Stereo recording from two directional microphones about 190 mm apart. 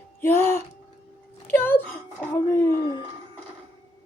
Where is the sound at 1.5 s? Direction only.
10° left (ahead or behind).